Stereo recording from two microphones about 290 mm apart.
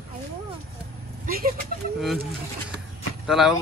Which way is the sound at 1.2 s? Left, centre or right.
Right.